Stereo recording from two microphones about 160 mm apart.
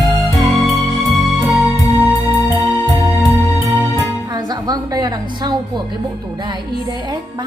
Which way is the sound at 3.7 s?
20° right (ahead or behind).